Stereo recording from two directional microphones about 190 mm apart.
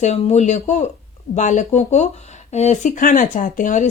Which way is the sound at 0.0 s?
35° left (ahead or behind).